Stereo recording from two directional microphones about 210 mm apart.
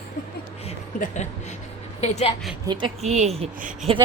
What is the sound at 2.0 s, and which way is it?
Speech, 30° left (ahead or behind).